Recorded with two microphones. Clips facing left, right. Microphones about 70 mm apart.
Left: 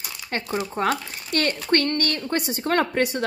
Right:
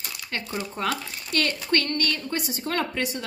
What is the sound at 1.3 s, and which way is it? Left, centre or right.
A woman's voice, left.